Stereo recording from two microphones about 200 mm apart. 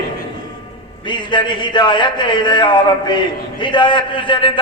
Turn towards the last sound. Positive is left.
turn(degrees=25)  # may be behind; listen again after turning